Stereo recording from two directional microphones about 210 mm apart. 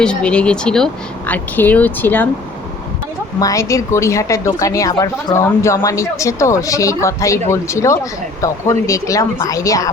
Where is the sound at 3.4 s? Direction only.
15° left (ahead or behind).